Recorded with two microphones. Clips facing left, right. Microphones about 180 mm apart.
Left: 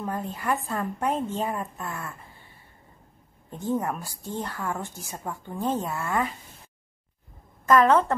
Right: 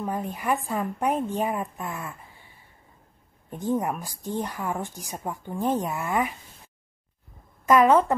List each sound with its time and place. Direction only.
0.0 s a woman's voice: 15° right (ahead or behind)
3.4 s a woman's voice: 15° right (ahead or behind)
7.6 s a woman's voice: 15° right (ahead or behind)